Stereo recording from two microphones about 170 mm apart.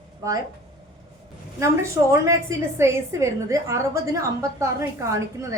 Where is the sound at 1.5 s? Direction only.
15° right (ahead or behind).